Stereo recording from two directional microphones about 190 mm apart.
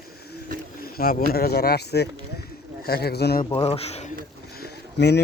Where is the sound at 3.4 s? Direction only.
30° left (ahead or behind).